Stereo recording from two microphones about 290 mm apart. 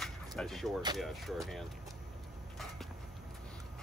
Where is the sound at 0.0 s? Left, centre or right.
Centre.